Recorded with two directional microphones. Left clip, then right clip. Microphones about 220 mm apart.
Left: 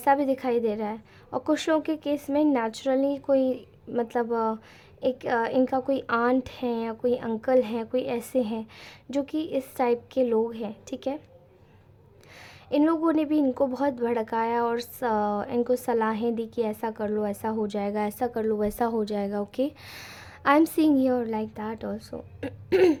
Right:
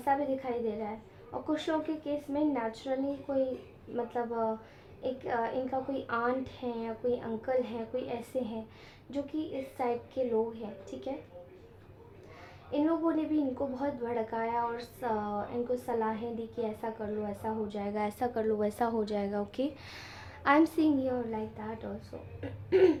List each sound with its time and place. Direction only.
0.0 s a woman's voice: 40° left (ahead or behind)
12.7 s a woman's voice: 40° left (ahead or behind)